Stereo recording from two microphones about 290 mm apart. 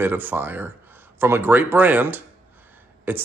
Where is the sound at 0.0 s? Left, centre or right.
Centre.